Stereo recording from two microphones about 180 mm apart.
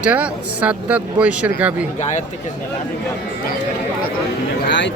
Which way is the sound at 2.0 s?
40° left (ahead or behind).